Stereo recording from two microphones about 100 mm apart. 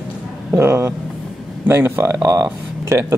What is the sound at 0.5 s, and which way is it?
Speech, 25° right (ahead or behind).